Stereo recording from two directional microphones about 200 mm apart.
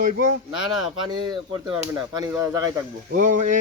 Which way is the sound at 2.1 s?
20° right (ahead or behind).